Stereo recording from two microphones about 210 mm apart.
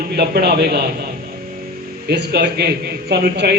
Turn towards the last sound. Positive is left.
turn(degrees=-50)  # may be behind; listen again after turning